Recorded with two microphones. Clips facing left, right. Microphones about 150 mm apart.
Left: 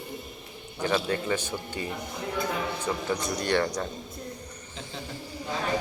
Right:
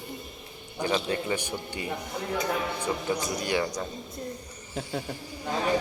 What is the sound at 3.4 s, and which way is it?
Speech, 10° right (ahead or behind).